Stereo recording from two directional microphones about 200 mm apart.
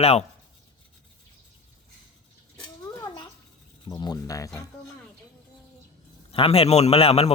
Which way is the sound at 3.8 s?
20° left (ahead or behind).